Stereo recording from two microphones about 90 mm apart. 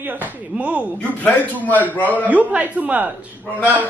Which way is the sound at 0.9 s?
15° left (ahead or behind).